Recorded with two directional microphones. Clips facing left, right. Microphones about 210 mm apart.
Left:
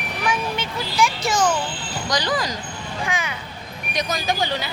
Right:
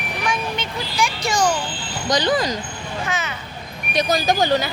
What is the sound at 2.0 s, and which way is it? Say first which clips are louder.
Speech: right 5 dB; 25° right (ahead or behind).